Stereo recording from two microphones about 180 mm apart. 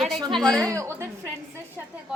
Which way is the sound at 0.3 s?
5° left (ahead or behind).